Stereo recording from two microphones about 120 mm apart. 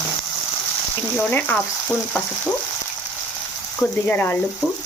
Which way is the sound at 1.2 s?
15° left (ahead or behind).